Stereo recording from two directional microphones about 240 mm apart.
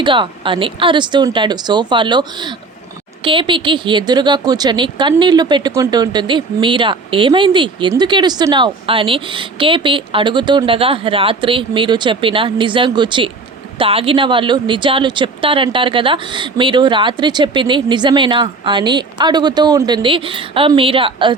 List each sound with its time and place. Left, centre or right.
0.0 s speech: centre